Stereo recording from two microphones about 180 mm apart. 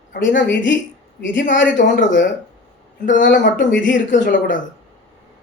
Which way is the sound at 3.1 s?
90° left.